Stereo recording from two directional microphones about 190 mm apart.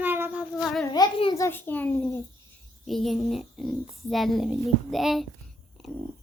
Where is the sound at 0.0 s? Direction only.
10° right (ahead or behind).